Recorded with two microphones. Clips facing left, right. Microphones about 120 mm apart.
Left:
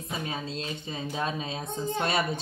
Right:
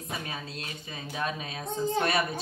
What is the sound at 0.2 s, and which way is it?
A woman's voice, 25° left (ahead or behind).